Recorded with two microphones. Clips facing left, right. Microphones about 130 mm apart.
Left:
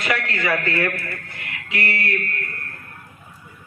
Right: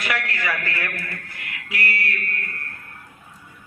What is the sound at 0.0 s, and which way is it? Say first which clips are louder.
A man's voice: left 3 dB; 25° left (ahead or behind).